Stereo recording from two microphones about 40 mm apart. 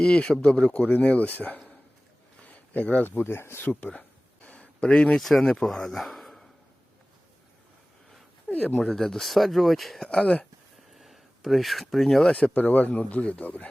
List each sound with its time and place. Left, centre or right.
0.0 s speech: left
3.3 s speech: left
4.5 s a sound: left
5.4 s speech: centre
8.4 s speech: left
8.8 s speech: centre
9.3 s speech: centre
10.0 s speech: centre
10.9 s speech: centre
12.5 s speech: left